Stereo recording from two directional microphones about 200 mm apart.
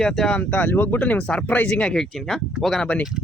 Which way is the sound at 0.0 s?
Centre (ahead or behind).